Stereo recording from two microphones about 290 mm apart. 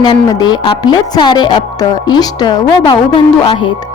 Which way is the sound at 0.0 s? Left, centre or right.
Centre.